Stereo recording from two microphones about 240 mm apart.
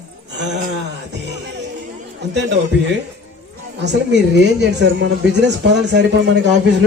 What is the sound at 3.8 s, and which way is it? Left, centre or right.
A woman's voice, right.